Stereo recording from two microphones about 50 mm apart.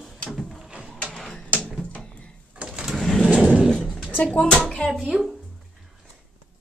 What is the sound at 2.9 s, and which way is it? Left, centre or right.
Bird, centre.